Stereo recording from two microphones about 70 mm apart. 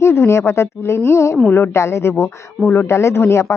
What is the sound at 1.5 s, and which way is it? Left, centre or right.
Speech, left.